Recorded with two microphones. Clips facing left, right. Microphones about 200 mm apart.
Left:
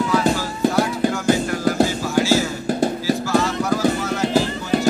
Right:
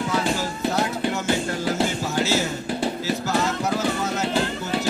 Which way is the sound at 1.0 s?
45° left (ahead or behind).